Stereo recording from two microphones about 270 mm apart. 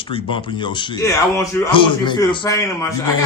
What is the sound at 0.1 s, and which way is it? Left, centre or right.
A man's voice, centre.